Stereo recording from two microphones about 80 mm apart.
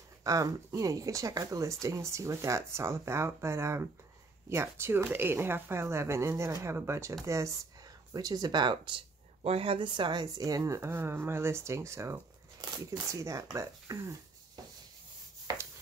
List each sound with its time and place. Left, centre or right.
0.2 s speech: right
8.1 s speech: right
15.5 s chopping: right